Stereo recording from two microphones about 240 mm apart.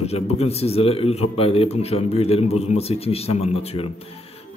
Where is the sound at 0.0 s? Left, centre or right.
Left.